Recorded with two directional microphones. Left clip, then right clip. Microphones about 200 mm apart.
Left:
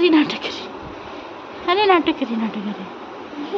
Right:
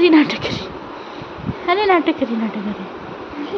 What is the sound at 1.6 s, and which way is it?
Speech, 5° right (ahead or behind).